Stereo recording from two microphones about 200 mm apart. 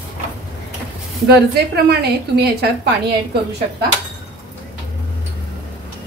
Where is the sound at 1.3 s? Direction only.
55° right (ahead or behind).